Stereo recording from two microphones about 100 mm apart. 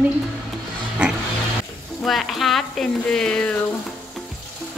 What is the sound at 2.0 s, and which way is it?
Speech, centre (ahead or behind).